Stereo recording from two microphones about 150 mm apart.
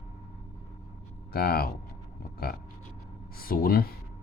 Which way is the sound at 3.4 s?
75° left (ahead or behind).